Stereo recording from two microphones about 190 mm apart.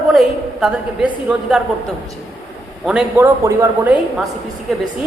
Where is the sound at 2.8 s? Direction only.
5° right (ahead or behind).